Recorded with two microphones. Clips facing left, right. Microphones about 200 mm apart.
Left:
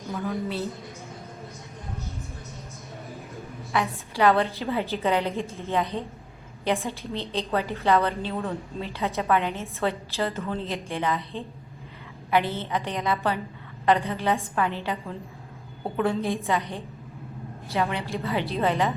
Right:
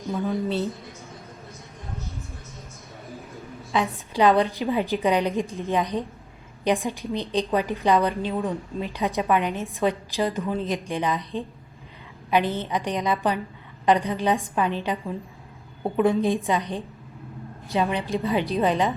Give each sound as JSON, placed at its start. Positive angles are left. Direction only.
{"t": 0.1, "sound": "a woman's voice", "side_deg": -15}
{"t": 3.7, "sound": "a woman's voice", "side_deg": -20}